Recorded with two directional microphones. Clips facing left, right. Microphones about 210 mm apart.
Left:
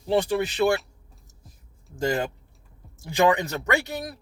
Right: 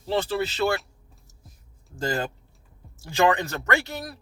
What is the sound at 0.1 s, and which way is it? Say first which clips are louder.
Speech: left 3 dB; 15° left (ahead or behind).